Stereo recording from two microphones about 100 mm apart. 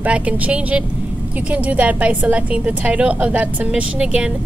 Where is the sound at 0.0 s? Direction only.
15° right (ahead or behind).